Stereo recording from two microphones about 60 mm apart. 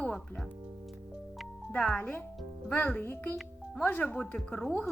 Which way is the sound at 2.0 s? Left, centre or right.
Left.